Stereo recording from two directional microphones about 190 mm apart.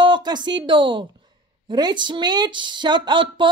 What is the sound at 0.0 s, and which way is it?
A woman's voice, 25° right (ahead or behind).